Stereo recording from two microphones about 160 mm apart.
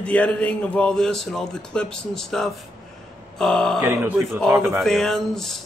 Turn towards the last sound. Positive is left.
turn(degrees=5)  # may be behind; listen again after turning